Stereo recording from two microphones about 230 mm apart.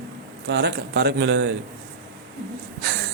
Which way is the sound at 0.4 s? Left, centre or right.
Right.